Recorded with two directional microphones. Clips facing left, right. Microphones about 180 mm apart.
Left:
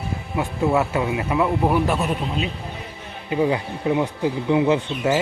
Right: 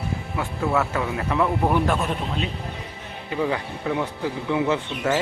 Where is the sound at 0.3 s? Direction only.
20° left (ahead or behind).